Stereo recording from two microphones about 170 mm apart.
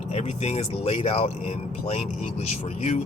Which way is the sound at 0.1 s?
40° left (ahead or behind).